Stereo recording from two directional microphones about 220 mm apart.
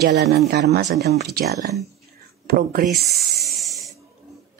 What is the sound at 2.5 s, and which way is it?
Speech, 45° right (ahead or behind).